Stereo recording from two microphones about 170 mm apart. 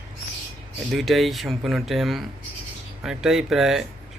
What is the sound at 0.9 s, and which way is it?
Speech, centre (ahead or behind).